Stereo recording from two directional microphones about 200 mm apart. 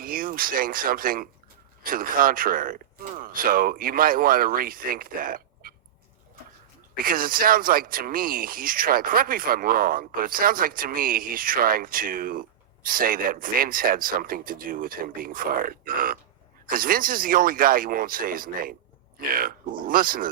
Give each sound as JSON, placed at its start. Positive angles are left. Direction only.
{"t": 0.0, "sound": "speech", "side_deg": -45}
{"t": 6.9, "sound": "speech", "side_deg": -45}